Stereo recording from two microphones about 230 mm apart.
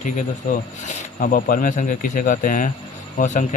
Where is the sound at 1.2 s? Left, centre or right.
Left.